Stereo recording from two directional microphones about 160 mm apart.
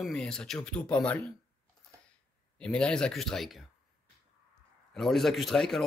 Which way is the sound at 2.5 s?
5° left (ahead or behind).